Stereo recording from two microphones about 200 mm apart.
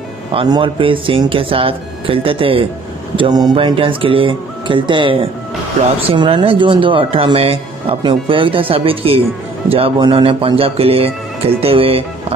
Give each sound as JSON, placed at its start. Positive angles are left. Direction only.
{"t": 0.3, "sound": "speech", "side_deg": -25}